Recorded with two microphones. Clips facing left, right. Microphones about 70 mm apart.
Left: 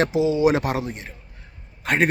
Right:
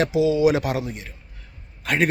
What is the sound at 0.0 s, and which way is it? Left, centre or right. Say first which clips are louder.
A man's voice: even; left.